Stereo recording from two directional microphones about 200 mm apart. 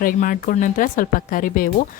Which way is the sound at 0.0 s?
45° left (ahead or behind).